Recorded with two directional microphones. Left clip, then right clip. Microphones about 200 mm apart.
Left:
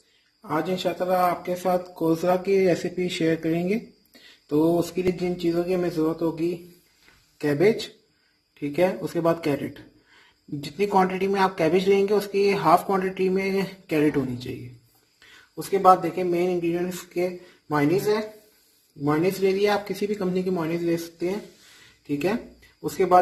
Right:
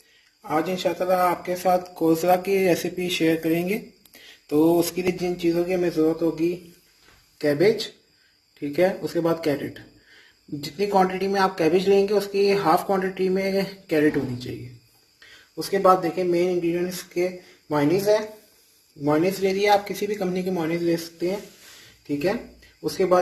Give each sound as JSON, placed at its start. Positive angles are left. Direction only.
{"t": 0.4, "sound": "speech", "side_deg": 45}
{"t": 8.7, "sound": "speech", "side_deg": 35}
{"t": 10.6, "sound": "speech", "side_deg": 35}
{"t": 19.2, "sound": "speech", "side_deg": 40}